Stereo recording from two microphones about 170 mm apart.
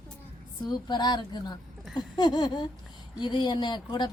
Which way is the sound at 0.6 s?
25° left (ahead or behind).